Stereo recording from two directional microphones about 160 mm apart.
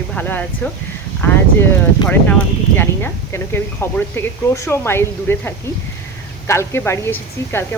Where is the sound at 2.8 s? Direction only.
15° left (ahead or behind).